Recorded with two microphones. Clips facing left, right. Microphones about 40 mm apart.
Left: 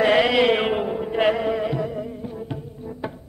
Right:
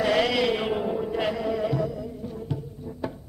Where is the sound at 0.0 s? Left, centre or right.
Left.